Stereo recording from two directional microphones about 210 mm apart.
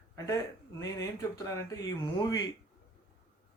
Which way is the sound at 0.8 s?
15° left (ahead or behind).